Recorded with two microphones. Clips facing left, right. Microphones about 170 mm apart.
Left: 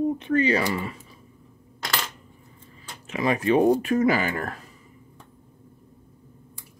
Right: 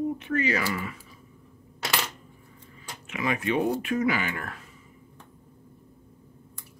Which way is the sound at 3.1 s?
35° left (ahead or behind).